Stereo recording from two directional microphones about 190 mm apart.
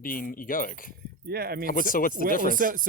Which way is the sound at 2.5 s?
45° right (ahead or behind).